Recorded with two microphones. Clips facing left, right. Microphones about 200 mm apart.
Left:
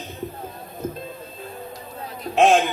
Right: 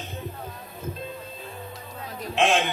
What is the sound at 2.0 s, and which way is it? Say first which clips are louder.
Music: left 6 dB; 40° left (ahead or behind).